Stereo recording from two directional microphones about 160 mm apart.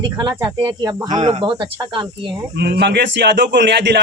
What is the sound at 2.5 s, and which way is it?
Speech, 90° right.